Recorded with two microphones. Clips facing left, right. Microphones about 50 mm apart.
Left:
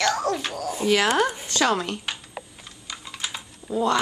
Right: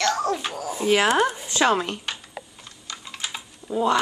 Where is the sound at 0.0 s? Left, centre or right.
Centre.